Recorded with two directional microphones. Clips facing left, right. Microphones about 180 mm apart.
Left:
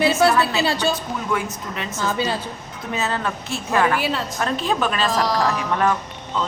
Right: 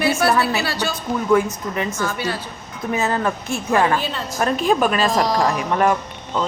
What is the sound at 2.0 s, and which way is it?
Speech, 20° left (ahead or behind).